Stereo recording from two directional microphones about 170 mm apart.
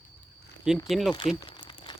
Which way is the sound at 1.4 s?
30° left (ahead or behind).